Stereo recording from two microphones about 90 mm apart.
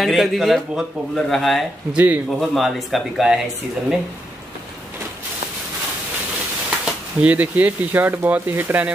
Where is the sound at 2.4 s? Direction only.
Centre (ahead or behind).